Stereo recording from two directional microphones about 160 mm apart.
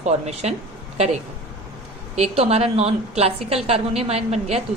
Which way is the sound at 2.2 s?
40° right (ahead or behind).